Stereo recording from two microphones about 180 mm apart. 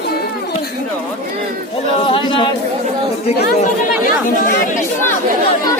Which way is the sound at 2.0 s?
25° left (ahead or behind).